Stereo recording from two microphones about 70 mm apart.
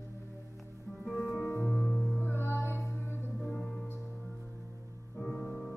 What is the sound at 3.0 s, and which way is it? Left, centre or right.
Music, left.